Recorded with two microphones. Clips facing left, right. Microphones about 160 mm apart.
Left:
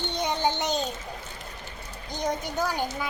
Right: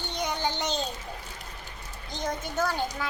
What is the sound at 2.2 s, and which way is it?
Speech, 15° left (ahead or behind).